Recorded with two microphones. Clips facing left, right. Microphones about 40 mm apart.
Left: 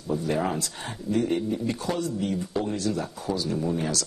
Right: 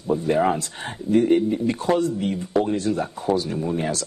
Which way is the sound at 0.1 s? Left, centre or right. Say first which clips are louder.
Right 6 dB; right.